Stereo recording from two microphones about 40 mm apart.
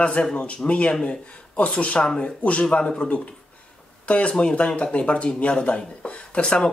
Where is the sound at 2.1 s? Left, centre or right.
Centre.